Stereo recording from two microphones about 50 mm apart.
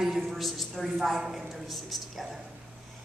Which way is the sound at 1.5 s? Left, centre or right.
Centre.